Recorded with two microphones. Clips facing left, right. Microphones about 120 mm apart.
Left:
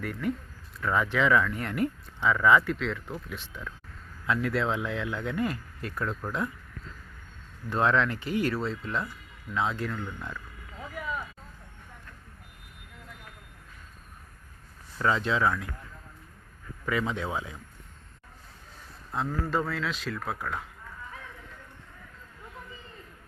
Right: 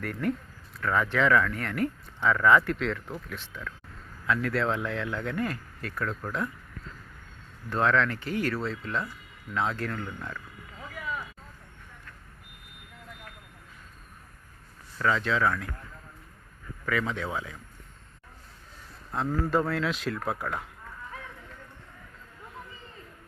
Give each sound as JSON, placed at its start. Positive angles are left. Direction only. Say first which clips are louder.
{"t": 0.0, "sound": "speech", "louder": "right 1 dB", "side_deg": 5}
{"t": 2.2, "sound": "speech", "louder": "even", "side_deg": 5}
{"t": 7.8, "sound": "speech", "louder": "even", "side_deg": 15}
{"t": 14.9, "sound": "speech", "louder": "even", "side_deg": 20}
{"t": 16.8, "sound": "speech", "louder": "even", "side_deg": 15}
{"t": 19.1, "sound": "speech", "louder": "right 3 dB", "side_deg": -5}